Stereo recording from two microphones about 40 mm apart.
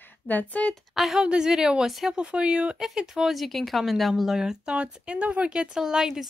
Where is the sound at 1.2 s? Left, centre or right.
Right.